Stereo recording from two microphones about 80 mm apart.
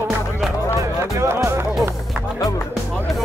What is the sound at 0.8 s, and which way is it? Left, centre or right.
Music, right.